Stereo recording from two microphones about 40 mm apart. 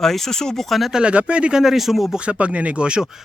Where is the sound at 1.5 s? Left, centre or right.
Centre.